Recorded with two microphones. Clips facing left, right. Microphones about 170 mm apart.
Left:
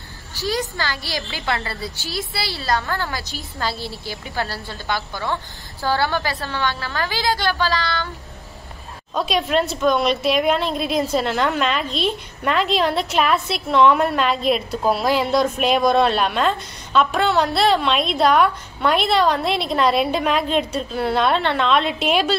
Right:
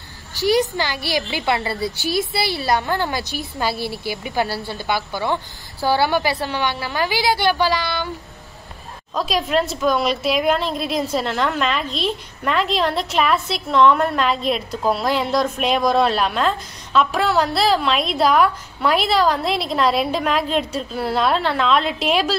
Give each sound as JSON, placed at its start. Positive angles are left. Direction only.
{"t": 0.3, "sound": "a woman's voice", "side_deg": -15}
{"t": 9.1, "sound": "a woman's voice", "side_deg": 0}